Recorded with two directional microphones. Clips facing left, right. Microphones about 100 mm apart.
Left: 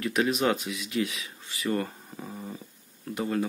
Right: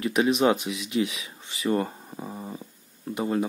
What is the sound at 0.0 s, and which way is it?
Speech, 20° right (ahead or behind).